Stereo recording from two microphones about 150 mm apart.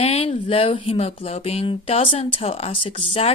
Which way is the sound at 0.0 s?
40° left (ahead or behind).